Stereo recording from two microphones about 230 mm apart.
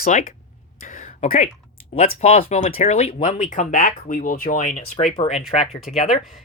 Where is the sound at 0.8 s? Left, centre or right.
Left.